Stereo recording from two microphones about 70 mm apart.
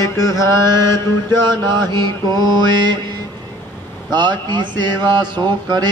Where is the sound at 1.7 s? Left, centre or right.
Right.